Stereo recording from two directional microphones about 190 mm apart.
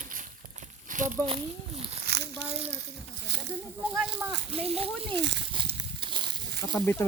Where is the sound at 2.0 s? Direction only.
60° right (ahead or behind).